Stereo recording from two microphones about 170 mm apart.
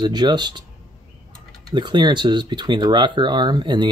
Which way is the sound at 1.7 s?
25° right (ahead or behind).